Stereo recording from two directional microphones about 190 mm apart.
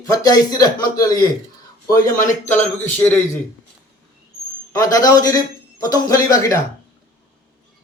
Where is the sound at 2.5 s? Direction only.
10° left (ahead or behind).